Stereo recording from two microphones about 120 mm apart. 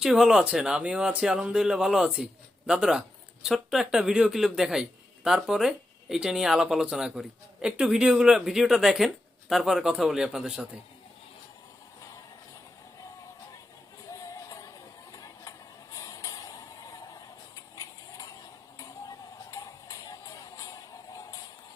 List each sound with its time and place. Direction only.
0.0 s a man's voice: 5° right (ahead or behind)
14.1 s music: 25° left (ahead or behind)
15.1 s vehicle: 30° left (ahead or behind)
18.8 s music: 30° left (ahead or behind)